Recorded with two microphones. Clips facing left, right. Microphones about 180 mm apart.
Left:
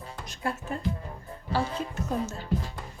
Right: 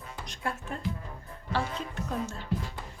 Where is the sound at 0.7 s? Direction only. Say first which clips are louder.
Left 3 dB; 5° left (ahead or behind).